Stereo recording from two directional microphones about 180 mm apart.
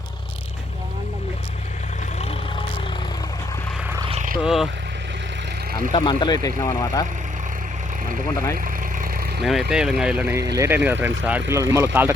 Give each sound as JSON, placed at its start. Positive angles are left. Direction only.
{"t": 4.1, "sound": "wild animals", "side_deg": -45}
{"t": 4.4, "sound": "speech", "side_deg": 0}
{"t": 5.9, "sound": "speech", "side_deg": 25}
{"t": 8.5, "sound": "vehicle", "side_deg": -50}
{"t": 9.4, "sound": "speech", "side_deg": 0}
{"t": 10.3, "sound": "speech", "side_deg": -20}